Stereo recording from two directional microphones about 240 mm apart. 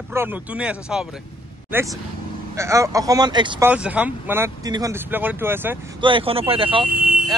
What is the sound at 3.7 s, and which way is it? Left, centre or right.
Speech, centre.